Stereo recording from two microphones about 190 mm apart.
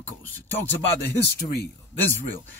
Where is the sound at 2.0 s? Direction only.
10° left (ahead or behind).